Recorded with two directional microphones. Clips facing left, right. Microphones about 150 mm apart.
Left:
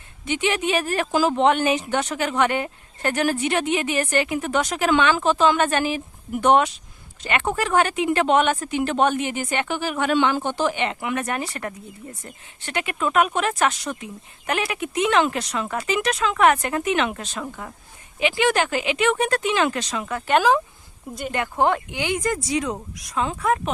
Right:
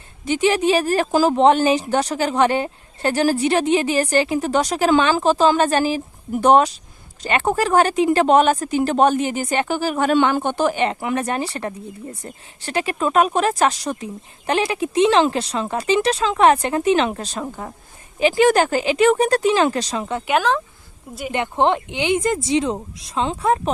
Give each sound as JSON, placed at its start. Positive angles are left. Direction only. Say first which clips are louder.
{"t": 0.3, "sound": "speech", "louder": "right 6 dB", "side_deg": -35}
{"t": 20.3, "sound": "speech", "louder": "left 1 dB", "side_deg": 5}
{"t": 21.3, "sound": "speech", "louder": "right 3 dB", "side_deg": -25}